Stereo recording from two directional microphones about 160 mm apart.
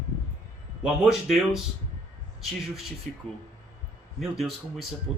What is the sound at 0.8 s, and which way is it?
A man's voice, 5° right (ahead or behind).